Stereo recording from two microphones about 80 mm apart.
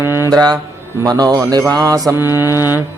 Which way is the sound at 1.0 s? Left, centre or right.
Right.